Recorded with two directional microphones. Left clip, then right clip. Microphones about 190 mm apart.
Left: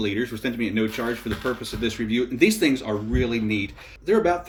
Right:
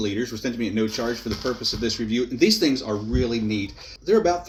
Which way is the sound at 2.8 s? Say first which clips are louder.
Even; 15° left (ahead or behind).